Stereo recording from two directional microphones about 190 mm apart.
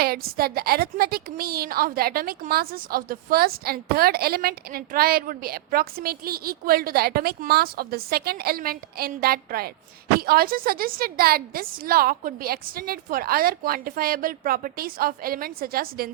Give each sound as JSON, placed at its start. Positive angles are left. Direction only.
{"t": 0.0, "sound": "a woman's voice", "side_deg": -55}